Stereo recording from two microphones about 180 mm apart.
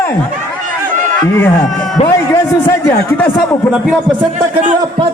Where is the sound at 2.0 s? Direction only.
40° left (ahead or behind).